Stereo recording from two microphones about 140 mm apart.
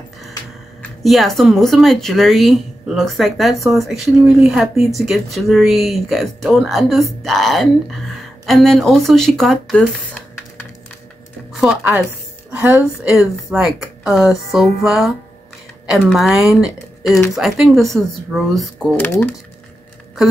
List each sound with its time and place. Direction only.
1.0 s speech: centre (ahead or behind)
11.6 s speech: 10° right (ahead or behind)
13.1 s speech: 5° right (ahead or behind)
18.9 s speech: 15° left (ahead or behind)